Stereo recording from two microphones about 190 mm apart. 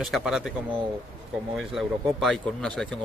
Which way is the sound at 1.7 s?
Centre (ahead or behind).